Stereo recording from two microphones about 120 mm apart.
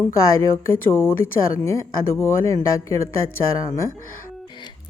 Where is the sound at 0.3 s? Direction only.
20° left (ahead or behind).